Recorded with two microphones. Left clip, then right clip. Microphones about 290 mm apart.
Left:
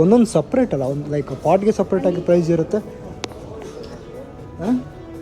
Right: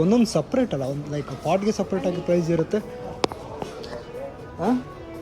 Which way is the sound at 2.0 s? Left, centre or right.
Centre.